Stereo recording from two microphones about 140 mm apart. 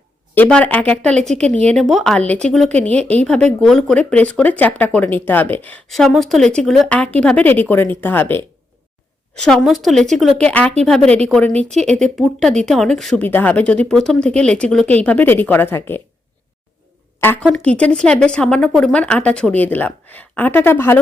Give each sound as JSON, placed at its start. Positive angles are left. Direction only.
{"t": 0.3, "sound": "speech", "side_deg": 10}
{"t": 5.9, "sound": "speech", "side_deg": 0}
{"t": 9.4, "sound": "a woman's voice", "side_deg": 0}
{"t": 11.8, "sound": "speech", "side_deg": -55}
{"t": 12.0, "sound": "a woman's voice", "side_deg": 5}
{"t": 17.2, "sound": "speech", "side_deg": 15}